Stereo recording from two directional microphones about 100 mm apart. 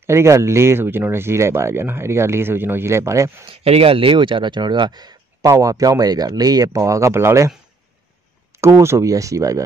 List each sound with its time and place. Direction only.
0.0 s speech: 25° right (ahead or behind)
3.4 s speech: 80° right; by 7.5 s 25° right (ahead or behind)
8.5 s speech: 25° right (ahead or behind)